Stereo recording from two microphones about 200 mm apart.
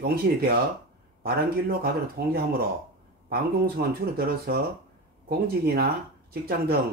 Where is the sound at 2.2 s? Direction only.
50° right (ahead or behind).